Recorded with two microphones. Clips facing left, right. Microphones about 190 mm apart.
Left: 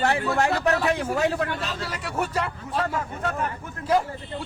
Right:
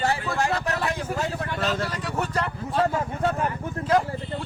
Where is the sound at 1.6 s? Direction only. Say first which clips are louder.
Right 6 dB; 45° right (ahead or behind).